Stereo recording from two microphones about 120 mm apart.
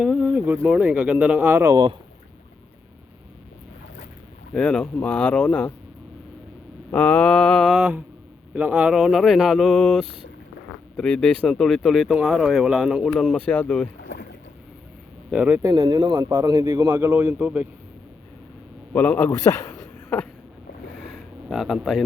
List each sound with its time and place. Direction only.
0.0 s speech: 5° right (ahead or behind)
4.5 s speech: 5° left (ahead or behind)
6.9 s speech: 10° left (ahead or behind)
15.3 s speech: 10° right (ahead or behind)
15.6 s speech: 30° right (ahead or behind); by 17.7 s 10° right (ahead or behind)
18.9 s speech: 15° left (ahead or behind)
19.7 s a sound: 15° left (ahead or behind)
21.1 s frog: centre (ahead or behind)